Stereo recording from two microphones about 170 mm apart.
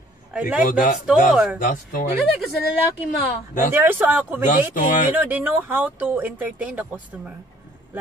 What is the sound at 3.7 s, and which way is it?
Speech, 15° right (ahead or behind).